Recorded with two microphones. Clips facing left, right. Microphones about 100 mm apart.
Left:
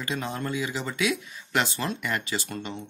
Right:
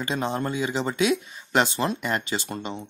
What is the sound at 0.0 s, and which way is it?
Speech, 25° right (ahead or behind).